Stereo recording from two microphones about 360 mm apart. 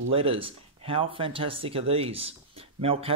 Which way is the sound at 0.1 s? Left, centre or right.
Centre.